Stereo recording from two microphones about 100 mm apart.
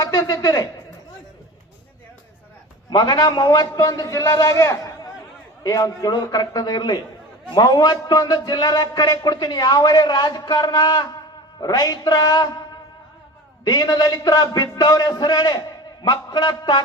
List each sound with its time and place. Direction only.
0.0 s a man's voice: 35° left (ahead or behind)
2.9 s a man's voice: 45° left (ahead or behind)
13.7 s a man's voice: 40° left (ahead or behind)